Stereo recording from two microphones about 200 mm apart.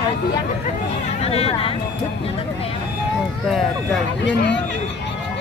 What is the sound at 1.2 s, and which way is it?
Speech, 30° left (ahead or behind).